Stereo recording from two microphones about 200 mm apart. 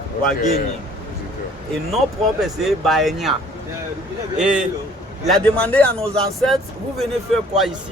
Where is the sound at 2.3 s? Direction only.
Centre (ahead or behind).